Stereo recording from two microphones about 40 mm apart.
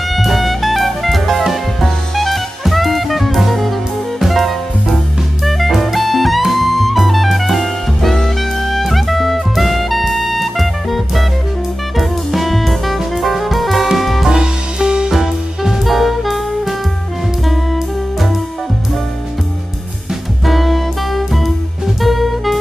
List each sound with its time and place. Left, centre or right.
0.1 s jazz: centre
12.0 s music: centre
14.3 s music: centre
15.0 s music: centre
20.4 s music: centre